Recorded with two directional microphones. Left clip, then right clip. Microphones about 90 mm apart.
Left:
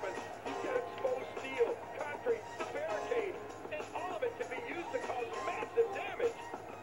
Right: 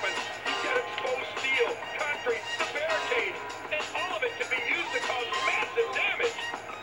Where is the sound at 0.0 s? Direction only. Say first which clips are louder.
Right 10 dB; 10° left (ahead or behind).